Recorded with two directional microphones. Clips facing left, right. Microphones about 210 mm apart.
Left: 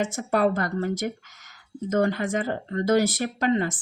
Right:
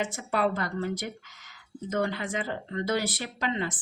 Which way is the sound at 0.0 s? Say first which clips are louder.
Left 5 dB; 45° left (ahead or behind).